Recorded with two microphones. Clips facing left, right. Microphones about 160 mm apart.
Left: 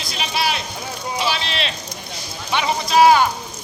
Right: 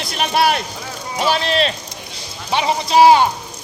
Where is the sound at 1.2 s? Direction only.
45° right (ahead or behind).